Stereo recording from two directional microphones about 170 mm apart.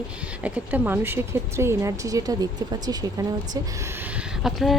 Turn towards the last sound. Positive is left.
turn(degrees=0)  # may be behind; listen again after turning